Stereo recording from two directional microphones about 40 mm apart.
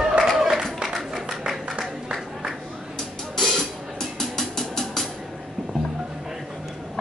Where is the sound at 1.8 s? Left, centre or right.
Centre.